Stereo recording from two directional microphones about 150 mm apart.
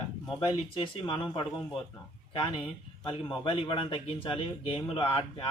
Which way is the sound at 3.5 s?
35° left (ahead or behind).